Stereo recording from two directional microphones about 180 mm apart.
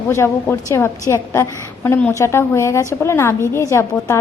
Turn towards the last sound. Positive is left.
turn(degrees=15)  # may be behind; listen again after turning